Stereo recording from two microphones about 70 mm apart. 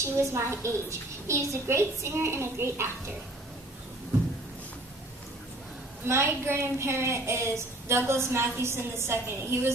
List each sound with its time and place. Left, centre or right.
0.0 s a child's voice: right
6.1 s a child's voice: right